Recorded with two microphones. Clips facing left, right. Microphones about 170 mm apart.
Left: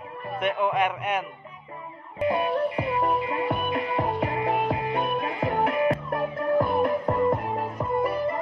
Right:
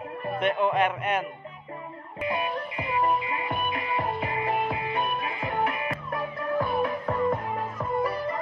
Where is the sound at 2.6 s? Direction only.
65° left (ahead or behind).